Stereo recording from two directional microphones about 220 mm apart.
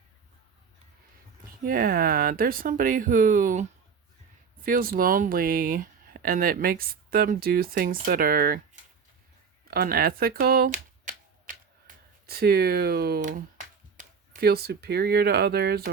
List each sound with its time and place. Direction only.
1.6 s speech: 40° right (ahead or behind)
9.6 s typewriter: 45° right (ahead or behind)
12.2 s speech: 45° right (ahead or behind)